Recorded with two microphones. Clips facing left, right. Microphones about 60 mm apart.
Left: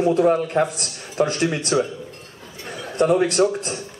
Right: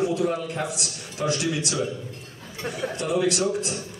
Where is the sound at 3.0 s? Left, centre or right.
Left.